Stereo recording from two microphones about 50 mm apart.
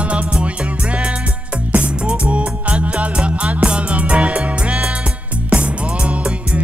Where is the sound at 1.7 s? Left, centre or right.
Right.